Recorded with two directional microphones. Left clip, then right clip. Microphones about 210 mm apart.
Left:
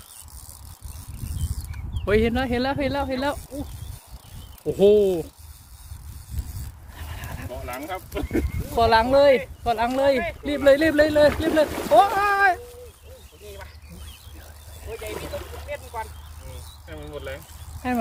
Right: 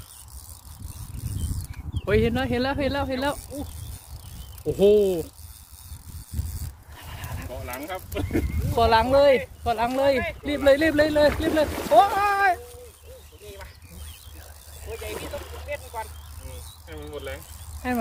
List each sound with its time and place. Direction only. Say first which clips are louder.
2.0 s speech: left 2 dB; centre (ahead or behind)
4.6 s speech: left 1 dB; 5° right (ahead or behind)
6.9 s dog: left 1 dB; centre (ahead or behind)
7.6 s speech: left 2 dB; 45° right (ahead or behind)
8.7 s speech: left 1 dB; 5° right (ahead or behind)
15.7 s vehicle: even; 50° right (ahead or behind)
16.5 s mechanisms: left 1 dB; 45° right (ahead or behind)
17.8 s speech: left 1 dB; 5° right (ahead or behind)